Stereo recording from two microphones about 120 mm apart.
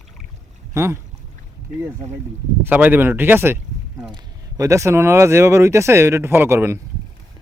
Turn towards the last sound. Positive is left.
turn(degrees=-20)  # may be behind; listen again after turning